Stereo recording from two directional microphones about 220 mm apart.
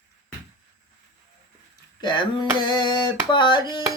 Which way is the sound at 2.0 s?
20° left (ahead or behind).